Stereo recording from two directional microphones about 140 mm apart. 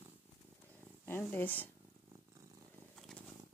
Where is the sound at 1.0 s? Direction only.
15° left (ahead or behind).